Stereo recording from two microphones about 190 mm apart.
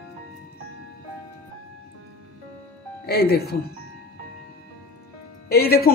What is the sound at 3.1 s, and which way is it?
Speech, 55° left (ahead or behind).